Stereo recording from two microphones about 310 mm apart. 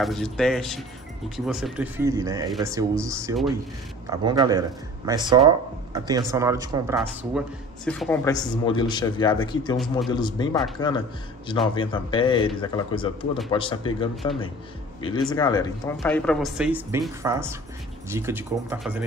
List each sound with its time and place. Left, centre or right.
0.0 s a man's voice: centre